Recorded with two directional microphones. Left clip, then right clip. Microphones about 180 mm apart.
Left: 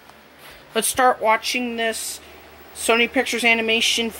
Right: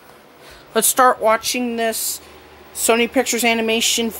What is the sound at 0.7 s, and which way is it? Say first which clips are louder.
Speech: right 4 dB; 20° right (ahead or behind).